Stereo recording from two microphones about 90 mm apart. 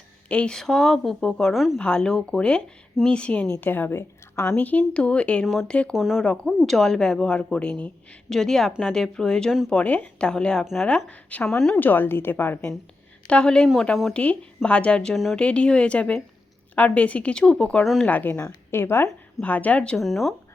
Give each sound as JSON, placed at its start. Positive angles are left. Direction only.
{"t": 0.3, "sound": "a woman's voice", "side_deg": 10}
{"t": 1.8, "sound": "speech", "side_deg": 10}
{"t": 5.9, "sound": "a woman's voice", "side_deg": -5}
{"t": 6.2, "sound": "a woman's voice", "side_deg": 10}
{"t": 11.4, "sound": "a woman's voice", "side_deg": 5}
{"t": 11.8, "sound": "a woman's voice", "side_deg": 20}
{"t": 13.2, "sound": "speech", "side_deg": 10}
{"t": 15.1, "sound": "a woman's voice", "side_deg": 0}
{"t": 15.4, "sound": "a woman's voice", "side_deg": 10}
{"t": 20.0, "sound": "a woman's voice", "side_deg": 0}